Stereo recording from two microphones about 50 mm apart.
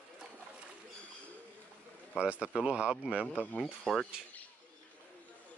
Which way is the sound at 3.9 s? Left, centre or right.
Centre.